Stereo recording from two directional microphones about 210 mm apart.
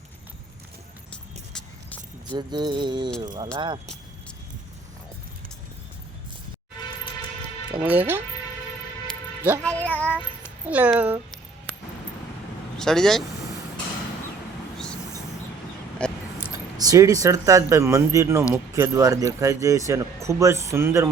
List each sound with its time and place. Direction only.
1.5 s vehicle: 5° left (ahead or behind)
2.3 s music: 20° right (ahead or behind)
7.8 s speech: 10° right (ahead or behind)
9.6 s child singing: 5° left (ahead or behind)
10.7 s speech: 5° right (ahead or behind)
12.8 s speech: centre (ahead or behind)
16.0 s a sound: 5° left (ahead or behind)
16.7 s speech: 15° right (ahead or behind)